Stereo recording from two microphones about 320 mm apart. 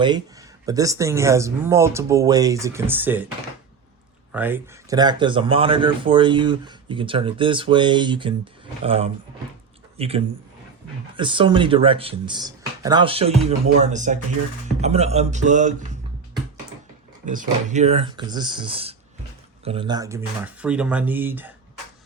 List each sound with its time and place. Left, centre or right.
0.6 s speech: centre
4.3 s speech: centre; by 15.7 s right
17.2 s speech: right; by 21.5 s centre